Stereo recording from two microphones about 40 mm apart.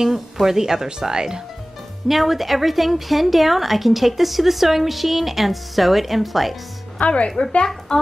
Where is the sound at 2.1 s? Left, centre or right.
Centre.